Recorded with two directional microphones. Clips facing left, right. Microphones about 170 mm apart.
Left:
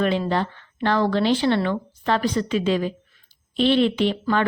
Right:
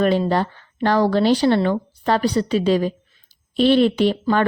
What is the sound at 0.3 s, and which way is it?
Speech, 40° right (ahead or behind).